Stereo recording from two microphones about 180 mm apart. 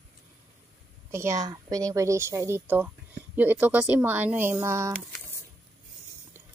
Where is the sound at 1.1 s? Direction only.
15° right (ahead or behind).